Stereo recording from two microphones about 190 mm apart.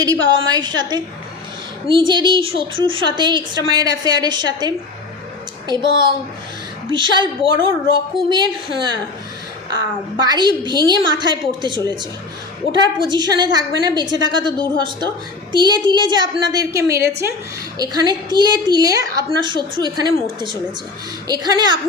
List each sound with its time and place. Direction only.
0.0 s a woman's voice: 20° right (ahead or behind)
10.2 s a woman's voice: 20° right (ahead or behind)
12.8 s a woman's voice: 25° right (ahead or behind)
21.2 s a woman's voice: 20° right (ahead or behind)